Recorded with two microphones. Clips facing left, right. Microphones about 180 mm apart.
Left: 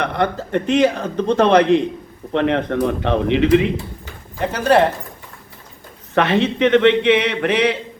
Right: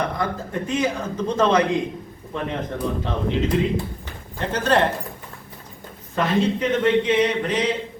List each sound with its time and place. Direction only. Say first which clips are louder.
0.0 s speech: left 5 dB; 70° left (ahead or behind)
4.4 s speech: left 5 dB; 10° left (ahead or behind)
6.1 s speech: left 4 dB; 75° left (ahead or behind)